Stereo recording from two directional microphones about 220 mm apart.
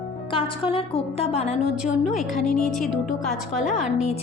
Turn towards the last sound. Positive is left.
turn(degrees=30)  # may be behind; listen again after turning